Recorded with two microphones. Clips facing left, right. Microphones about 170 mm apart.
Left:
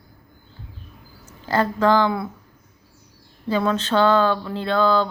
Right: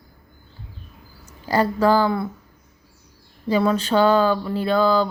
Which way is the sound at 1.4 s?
10° right (ahead or behind).